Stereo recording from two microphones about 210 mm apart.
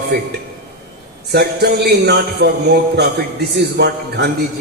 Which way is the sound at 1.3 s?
50° right (ahead or behind).